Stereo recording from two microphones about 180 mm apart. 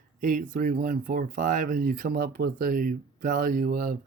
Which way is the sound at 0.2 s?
50° right (ahead or behind).